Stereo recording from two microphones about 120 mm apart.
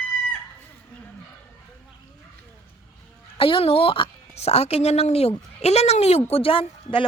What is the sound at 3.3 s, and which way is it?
A woman's voice, 50° left (ahead or behind).